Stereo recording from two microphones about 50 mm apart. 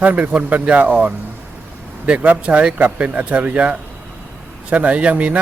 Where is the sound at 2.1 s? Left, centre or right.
Right.